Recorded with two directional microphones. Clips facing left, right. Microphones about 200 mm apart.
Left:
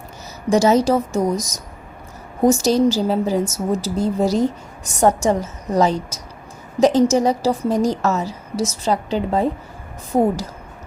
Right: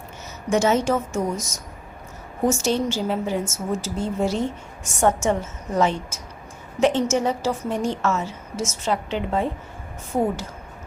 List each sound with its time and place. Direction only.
0.5 s a woman's voice: 35° left (ahead or behind)